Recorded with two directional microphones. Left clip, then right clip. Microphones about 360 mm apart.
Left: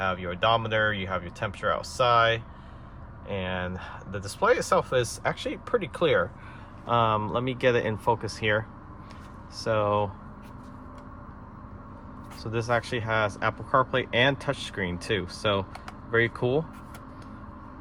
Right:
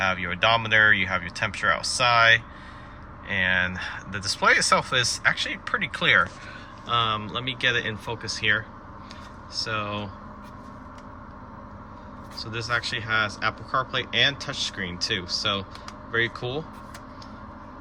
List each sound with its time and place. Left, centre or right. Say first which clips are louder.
0.0 s speech: right 3 dB; centre
12.4 s speech: even; centre